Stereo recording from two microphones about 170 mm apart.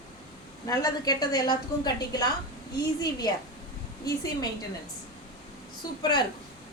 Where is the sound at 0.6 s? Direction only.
20° left (ahead or behind).